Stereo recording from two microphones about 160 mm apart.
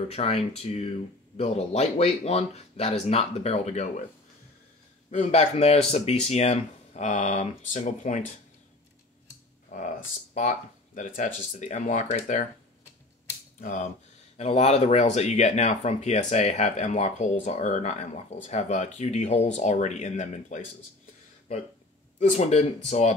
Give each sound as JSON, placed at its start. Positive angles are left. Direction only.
{"t": 0.1, "sound": "speech", "side_deg": 40}
{"t": 5.1, "sound": "speech", "side_deg": 45}
{"t": 9.7, "sound": "speech", "side_deg": 55}
{"t": 13.6, "sound": "speech", "side_deg": 55}
{"t": 14.3, "sound": "speech", "side_deg": 40}
{"t": 22.2, "sound": "speech", "side_deg": 50}